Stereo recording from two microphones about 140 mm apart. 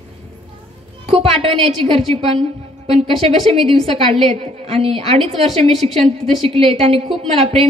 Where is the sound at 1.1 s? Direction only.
45° right (ahead or behind).